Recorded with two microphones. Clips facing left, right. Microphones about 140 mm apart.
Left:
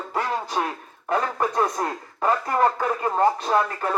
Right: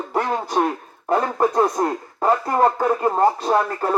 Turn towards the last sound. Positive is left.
turn(degrees=-30)  # may be behind; listen again after turning